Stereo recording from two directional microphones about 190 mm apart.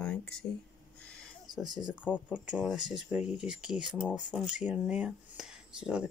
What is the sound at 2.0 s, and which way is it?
Speech, 10° left (ahead or behind).